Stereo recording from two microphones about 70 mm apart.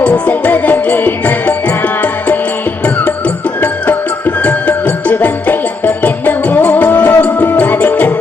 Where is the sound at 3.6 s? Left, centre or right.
Left.